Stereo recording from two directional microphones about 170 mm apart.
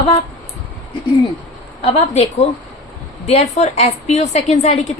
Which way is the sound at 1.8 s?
35° left (ahead or behind).